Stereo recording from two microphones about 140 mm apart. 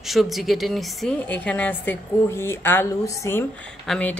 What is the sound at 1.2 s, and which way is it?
A woman's voice, 10° left (ahead or behind).